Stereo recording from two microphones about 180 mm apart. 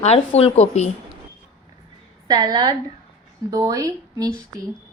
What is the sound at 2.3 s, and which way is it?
A woman's voice, 20° right (ahead or behind).